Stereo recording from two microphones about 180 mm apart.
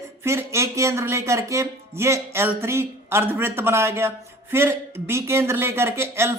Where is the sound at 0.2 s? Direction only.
15° right (ahead or behind).